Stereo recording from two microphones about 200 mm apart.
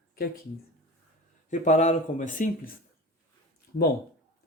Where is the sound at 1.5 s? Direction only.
35° left (ahead or behind).